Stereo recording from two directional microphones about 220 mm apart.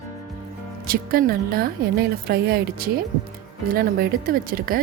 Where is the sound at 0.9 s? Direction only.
40° right (ahead or behind).